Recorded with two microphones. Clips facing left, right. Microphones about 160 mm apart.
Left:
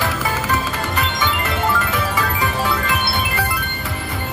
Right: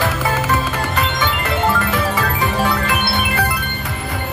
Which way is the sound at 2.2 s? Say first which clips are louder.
Right 2 dB; 20° right (ahead or behind).